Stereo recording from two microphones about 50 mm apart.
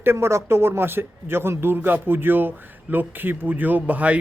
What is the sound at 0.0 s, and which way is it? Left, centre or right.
Speech, right.